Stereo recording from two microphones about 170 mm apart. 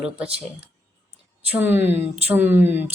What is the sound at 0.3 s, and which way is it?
Speech, 35° right (ahead or behind).